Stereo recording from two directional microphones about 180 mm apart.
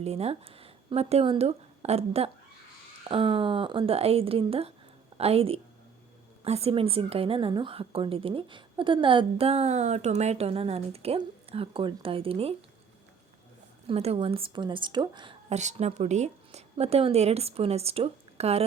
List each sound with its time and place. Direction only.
0.0 s a woman's voice: 35° right (ahead or behind)
13.8 s a woman's voice: 35° right (ahead or behind)